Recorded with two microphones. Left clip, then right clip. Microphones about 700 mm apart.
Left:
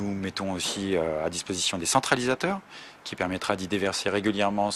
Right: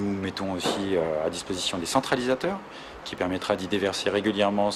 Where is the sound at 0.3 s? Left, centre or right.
Left.